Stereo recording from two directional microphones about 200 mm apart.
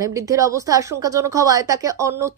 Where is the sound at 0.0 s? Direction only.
15° right (ahead or behind).